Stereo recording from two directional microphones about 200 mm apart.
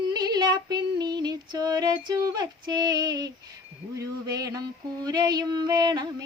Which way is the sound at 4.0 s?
15° right (ahead or behind).